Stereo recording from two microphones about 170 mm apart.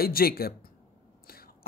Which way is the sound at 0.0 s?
60° left (ahead or behind).